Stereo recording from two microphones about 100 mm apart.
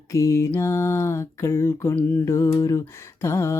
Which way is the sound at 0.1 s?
30° left (ahead or behind).